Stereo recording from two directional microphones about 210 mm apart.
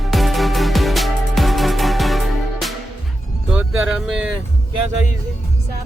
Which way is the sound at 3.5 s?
5° right (ahead or behind).